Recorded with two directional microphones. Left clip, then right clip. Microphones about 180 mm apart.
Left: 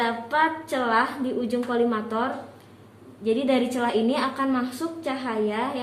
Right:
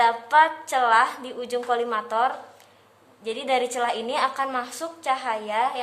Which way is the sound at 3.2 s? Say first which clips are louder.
Left 1 dB; 40° right (ahead or behind).